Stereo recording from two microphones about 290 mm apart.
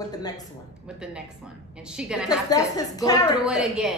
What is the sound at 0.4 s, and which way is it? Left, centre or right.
A woman's voice, centre.